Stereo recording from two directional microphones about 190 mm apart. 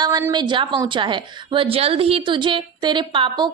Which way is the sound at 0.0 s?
20° right (ahead or behind).